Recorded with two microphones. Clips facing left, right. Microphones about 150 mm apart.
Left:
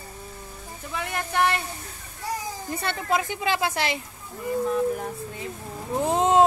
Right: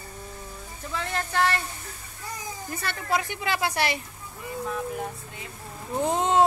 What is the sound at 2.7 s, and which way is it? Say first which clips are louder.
Speech: left 2 dB; 20° left (ahead or behind).